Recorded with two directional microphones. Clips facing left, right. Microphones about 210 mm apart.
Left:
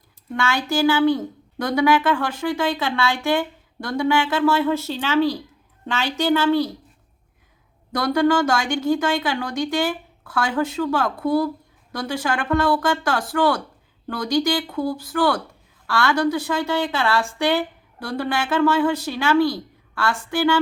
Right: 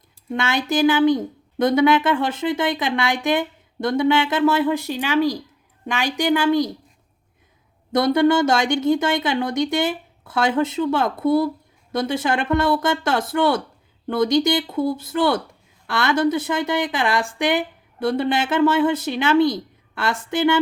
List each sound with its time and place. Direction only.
0.3 s speech: 20° right (ahead or behind)
7.9 s speech: 20° right (ahead or behind)